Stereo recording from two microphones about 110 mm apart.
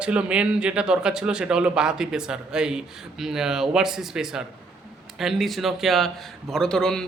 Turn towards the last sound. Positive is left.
turn(degrees=5)  # may be behind; listen again after turning